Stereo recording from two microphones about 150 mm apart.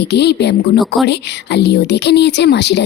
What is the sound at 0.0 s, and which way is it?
Speech, 90° left.